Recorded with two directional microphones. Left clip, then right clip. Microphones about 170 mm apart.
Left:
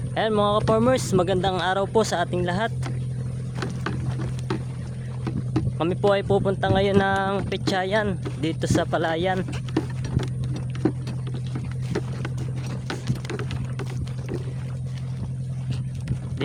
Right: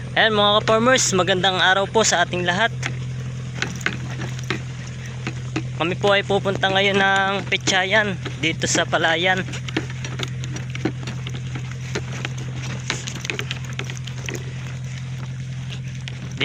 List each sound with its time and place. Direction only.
0.1 s speech: 15° left (ahead or behind)
5.5 s speech: 25° left (ahead or behind)
12.9 s typing: 40° left (ahead or behind)